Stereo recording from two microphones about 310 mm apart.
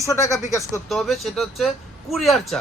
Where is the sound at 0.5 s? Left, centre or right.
Centre.